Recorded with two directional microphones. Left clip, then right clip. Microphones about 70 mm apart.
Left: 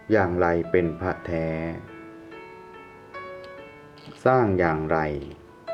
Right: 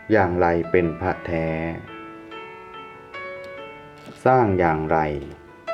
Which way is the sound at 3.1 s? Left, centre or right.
Centre.